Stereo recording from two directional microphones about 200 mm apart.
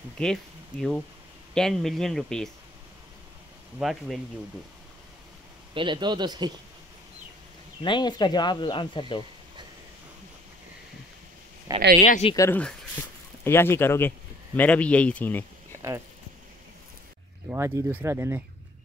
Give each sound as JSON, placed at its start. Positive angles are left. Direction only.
{"t": 0.2, "sound": "speech", "side_deg": 5}
{"t": 3.8, "sound": "speech", "side_deg": 0}
{"t": 5.8, "sound": "speech", "side_deg": -25}
{"t": 7.8, "sound": "speech", "side_deg": 20}
{"t": 12.0, "sound": "speech", "side_deg": 35}
{"t": 12.4, "sound": "speech", "side_deg": 10}
{"t": 17.5, "sound": "speech", "side_deg": -15}